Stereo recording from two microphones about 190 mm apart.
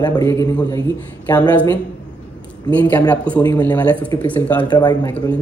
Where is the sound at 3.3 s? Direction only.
20° left (ahead or behind).